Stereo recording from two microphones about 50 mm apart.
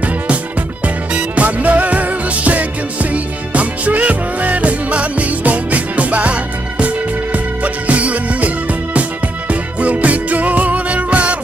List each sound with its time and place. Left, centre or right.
0.8 s music: right